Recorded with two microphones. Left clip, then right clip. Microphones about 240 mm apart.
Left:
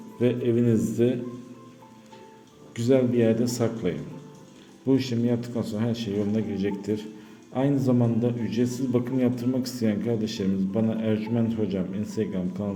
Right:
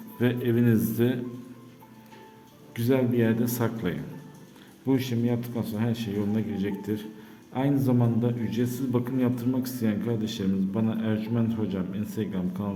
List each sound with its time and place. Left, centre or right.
0.2 s speech: centre
2.7 s a man's voice: centre